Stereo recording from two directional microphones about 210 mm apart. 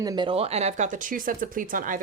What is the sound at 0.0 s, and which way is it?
Speech, 20° right (ahead or behind).